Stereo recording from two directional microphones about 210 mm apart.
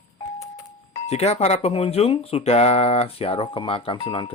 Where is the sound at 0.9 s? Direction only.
30° left (ahead or behind).